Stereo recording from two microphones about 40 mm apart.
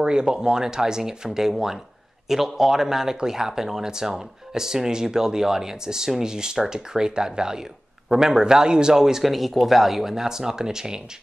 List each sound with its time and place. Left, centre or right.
0.0 s speech: centre